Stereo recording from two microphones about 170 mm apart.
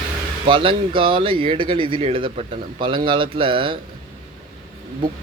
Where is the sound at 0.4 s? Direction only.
30° right (ahead or behind).